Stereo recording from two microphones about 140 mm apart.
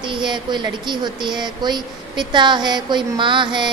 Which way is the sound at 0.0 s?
35° right (ahead or behind).